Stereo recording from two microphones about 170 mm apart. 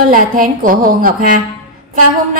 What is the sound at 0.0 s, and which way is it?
A woman's voice, 55° right (ahead or behind).